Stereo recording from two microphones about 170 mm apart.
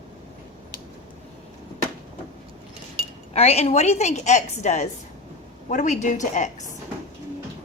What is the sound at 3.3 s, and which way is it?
A woman's voice, 40° left (ahead or behind).